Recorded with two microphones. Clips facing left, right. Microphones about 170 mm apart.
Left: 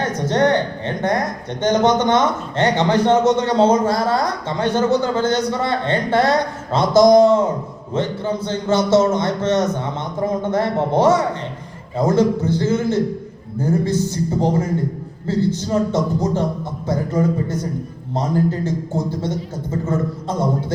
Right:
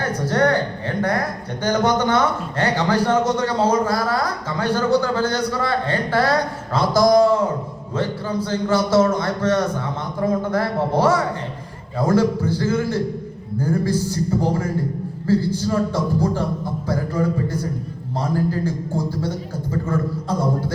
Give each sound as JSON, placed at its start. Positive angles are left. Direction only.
{"t": 0.0, "sound": "a man's voice", "side_deg": 25}